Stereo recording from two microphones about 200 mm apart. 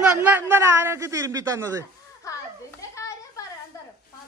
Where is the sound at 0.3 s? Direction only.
10° right (ahead or behind).